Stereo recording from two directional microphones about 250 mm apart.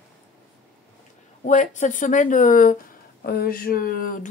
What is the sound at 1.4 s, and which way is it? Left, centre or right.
Speech, left.